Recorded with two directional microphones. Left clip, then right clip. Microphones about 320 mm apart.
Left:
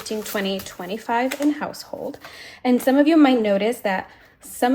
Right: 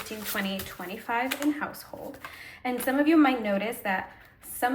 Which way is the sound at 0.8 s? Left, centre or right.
Centre.